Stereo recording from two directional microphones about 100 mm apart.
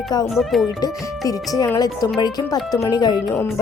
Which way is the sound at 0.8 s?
40° left (ahead or behind).